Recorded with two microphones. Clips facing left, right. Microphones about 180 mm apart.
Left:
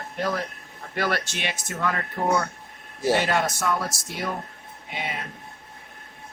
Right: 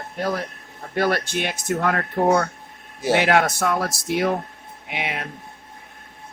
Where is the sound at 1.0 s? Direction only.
50° right (ahead or behind).